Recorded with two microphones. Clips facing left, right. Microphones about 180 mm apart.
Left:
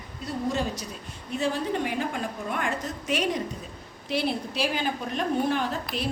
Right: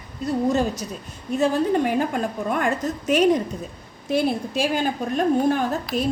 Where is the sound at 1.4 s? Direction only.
45° right (ahead or behind).